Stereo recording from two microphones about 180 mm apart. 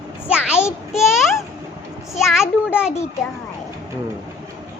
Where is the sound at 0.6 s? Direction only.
Centre (ahead or behind).